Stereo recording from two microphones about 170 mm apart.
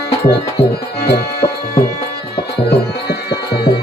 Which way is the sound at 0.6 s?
35° left (ahead or behind).